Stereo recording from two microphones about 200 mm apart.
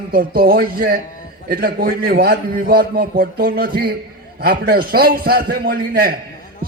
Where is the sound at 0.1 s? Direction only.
45° right (ahead or behind).